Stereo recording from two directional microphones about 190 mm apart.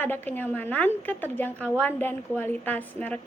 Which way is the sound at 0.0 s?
10° left (ahead or behind).